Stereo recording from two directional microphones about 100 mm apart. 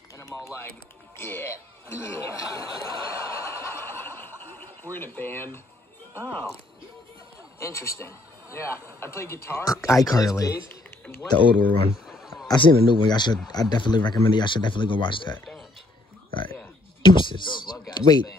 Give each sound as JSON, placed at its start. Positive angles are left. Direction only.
{"t": 0.3, "sound": "speech", "side_deg": 20}
{"t": 1.1, "sound": "chuckle", "side_deg": 25}
{"t": 6.1, "sound": "speech", "side_deg": 20}
{"t": 7.5, "sound": "a man's voice", "side_deg": 30}
{"t": 11.3, "sound": "speech", "side_deg": 15}
{"t": 11.9, "sound": "a sound", "side_deg": -5}
{"t": 13.0, "sound": "speech", "side_deg": 50}
{"t": 17.0, "sound": "speech", "side_deg": 55}